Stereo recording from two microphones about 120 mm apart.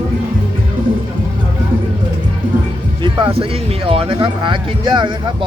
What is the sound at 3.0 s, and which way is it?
Speech, 45° right (ahead or behind).